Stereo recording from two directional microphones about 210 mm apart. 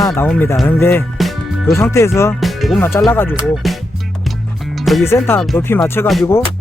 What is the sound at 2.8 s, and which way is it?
Speech, 15° left (ahead or behind).